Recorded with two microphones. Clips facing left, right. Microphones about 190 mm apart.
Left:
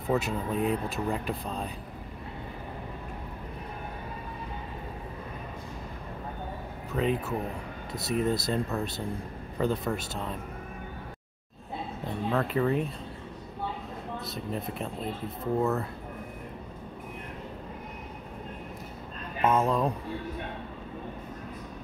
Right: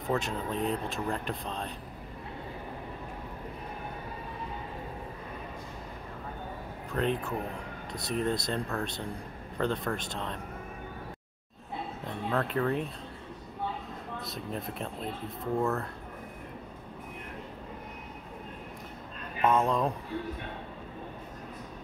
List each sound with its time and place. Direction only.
0.1 s speech: 5° left (ahead or behind)
6.9 s speech: 5° left (ahead or behind)
12.3 s speech: centre (ahead or behind)
14.2 s speech: centre (ahead or behind)
19.4 s speech: 5° left (ahead or behind)